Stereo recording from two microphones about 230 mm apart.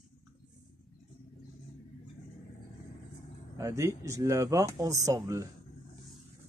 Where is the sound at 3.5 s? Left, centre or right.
Centre.